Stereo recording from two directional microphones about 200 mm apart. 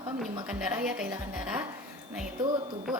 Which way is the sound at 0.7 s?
5° right (ahead or behind).